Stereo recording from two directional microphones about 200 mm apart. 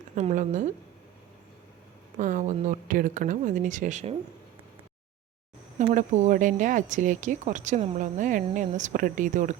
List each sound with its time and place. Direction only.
0.2 s speech: 35° right (ahead or behind)
2.1 s speech: 40° right (ahead or behind)
5.8 s speech: 35° right (ahead or behind)